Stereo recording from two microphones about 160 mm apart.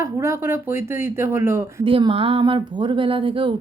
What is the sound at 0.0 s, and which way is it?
Speech, 15° right (ahead or behind).